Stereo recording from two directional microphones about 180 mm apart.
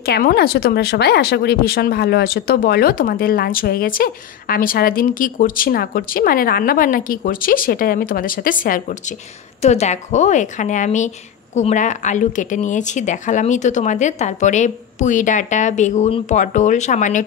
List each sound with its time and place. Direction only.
0.0 s speech: 55° left (ahead or behind)